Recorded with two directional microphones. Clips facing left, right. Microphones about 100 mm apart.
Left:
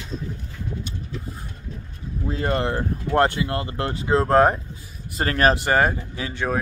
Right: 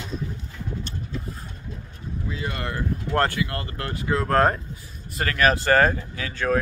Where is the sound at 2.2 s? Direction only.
45° left (ahead or behind).